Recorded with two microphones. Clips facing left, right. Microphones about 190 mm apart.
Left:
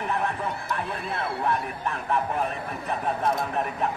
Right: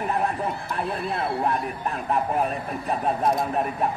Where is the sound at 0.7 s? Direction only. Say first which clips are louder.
Right 3 dB; 35° right (ahead or behind).